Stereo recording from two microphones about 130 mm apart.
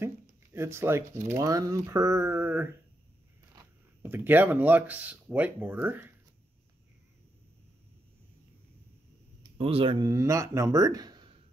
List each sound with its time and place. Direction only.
0.0 s speech: 20° right (ahead or behind)
4.0 s speech: 15° right (ahead or behind)
9.6 s speech: 50° right (ahead or behind)
9.9 s speech: 25° right (ahead or behind)